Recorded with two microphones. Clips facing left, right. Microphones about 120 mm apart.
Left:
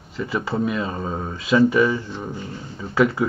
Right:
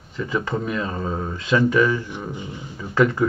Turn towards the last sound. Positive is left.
turn(degrees=5)  # may be behind; listen again after turning